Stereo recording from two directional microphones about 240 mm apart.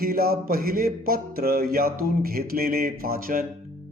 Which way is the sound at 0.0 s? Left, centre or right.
Right.